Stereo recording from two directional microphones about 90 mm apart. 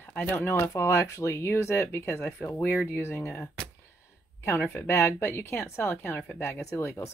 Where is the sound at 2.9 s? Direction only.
25° left (ahead or behind).